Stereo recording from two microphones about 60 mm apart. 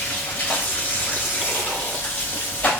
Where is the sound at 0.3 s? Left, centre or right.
Left.